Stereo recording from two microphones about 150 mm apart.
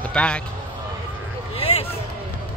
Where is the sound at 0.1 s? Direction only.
5° left (ahead or behind).